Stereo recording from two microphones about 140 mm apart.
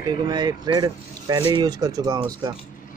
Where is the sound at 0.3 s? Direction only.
30° right (ahead or behind).